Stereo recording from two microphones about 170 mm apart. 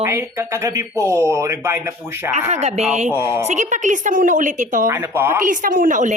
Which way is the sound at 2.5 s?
40° right (ahead or behind).